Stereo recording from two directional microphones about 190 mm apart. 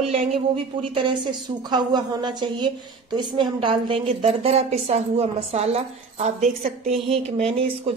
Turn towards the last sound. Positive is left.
turn(degrees=-30)  # may be behind; listen again after turning